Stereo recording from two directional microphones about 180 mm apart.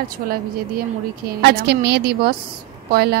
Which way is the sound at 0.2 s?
55° right (ahead or behind).